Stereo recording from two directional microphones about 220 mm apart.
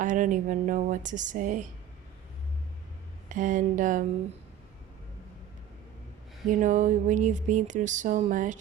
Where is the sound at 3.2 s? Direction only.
35° right (ahead or behind).